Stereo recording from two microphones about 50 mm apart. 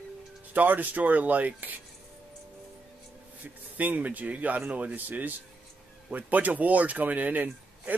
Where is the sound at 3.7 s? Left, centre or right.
Right.